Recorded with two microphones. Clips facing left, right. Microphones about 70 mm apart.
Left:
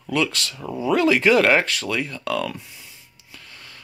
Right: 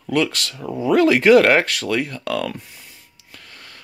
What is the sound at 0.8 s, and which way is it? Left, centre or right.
Speech, right.